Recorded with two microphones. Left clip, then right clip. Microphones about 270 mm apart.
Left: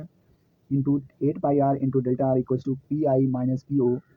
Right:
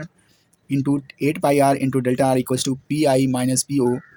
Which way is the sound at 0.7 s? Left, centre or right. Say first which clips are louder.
Right 4 dB; right.